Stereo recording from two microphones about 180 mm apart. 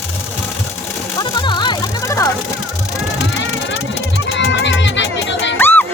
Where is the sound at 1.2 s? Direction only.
25° left (ahead or behind).